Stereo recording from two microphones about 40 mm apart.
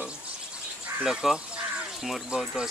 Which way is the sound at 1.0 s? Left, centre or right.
Centre.